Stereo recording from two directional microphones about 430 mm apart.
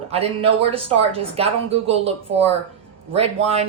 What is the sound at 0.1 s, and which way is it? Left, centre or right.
A woman's voice, centre.